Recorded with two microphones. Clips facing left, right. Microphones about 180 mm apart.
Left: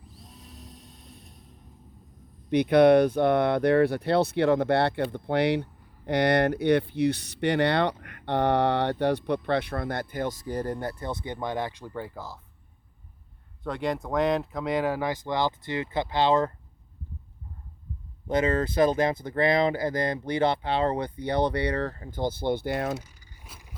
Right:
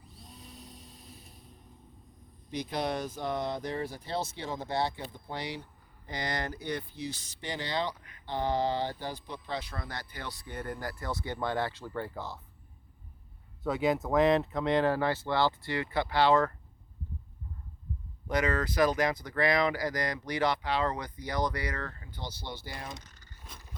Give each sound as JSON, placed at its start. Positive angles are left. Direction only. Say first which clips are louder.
{"t": 0.0, "sound": "a sound", "louder": "left 1 dB", "side_deg": 0}
{"t": 2.5, "sound": "speech", "louder": "left 15 dB", "side_deg": 65}
{"t": 12.1, "sound": "speech", "louder": "even", "side_deg": 0}
{"t": 13.6, "sound": "speech", "louder": "right 1 dB", "side_deg": -5}
{"t": 18.3, "sound": "speech", "louder": "left 5 dB", "side_deg": 25}
{"t": 22.2, "sound": "speech", "louder": "left 15 dB", "side_deg": 50}
{"t": 23.0, "sound": "a sound", "louder": "left 9 dB", "side_deg": 10}